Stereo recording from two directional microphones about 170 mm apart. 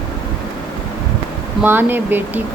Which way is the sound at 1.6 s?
10° right (ahead or behind).